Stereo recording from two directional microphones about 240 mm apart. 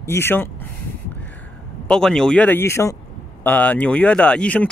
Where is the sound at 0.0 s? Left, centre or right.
Centre.